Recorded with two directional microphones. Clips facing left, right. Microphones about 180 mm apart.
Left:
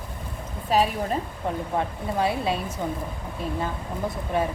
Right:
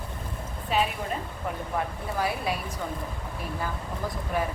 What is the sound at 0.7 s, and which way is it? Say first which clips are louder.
Speech: left 5 dB; 40° left (ahead or behind).